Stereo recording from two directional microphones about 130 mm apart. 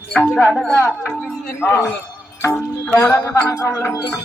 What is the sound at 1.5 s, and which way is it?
Speech, 20° left (ahead or behind).